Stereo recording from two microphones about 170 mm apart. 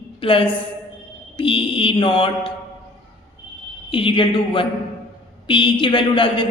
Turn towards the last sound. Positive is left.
turn(degrees=30)  # may be behind; listen again after turning